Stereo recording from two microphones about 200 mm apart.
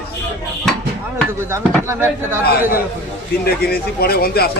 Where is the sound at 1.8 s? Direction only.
15° right (ahead or behind).